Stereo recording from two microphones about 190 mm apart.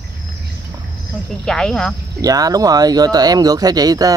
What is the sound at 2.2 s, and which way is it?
Speech, 20° right (ahead or behind).